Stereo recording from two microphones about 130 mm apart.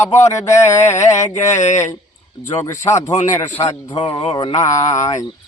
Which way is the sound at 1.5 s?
65° left (ahead or behind).